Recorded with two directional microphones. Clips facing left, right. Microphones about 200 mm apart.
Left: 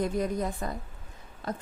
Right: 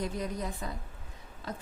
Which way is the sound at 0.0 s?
50° left (ahead or behind).